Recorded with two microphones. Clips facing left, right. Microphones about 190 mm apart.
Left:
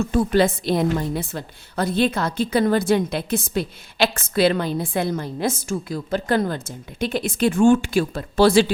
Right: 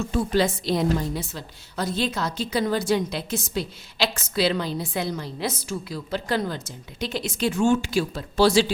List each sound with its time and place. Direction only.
0.1 s a woman's voice: 55° left (ahead or behind)